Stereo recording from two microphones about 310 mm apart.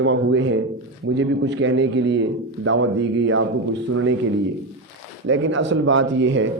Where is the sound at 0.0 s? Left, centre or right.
Right.